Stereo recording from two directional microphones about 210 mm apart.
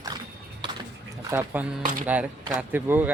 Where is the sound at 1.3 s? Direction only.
10° right (ahead or behind).